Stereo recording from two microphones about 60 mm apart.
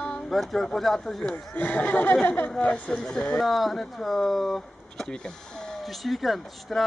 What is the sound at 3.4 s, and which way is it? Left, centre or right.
Speech, centre.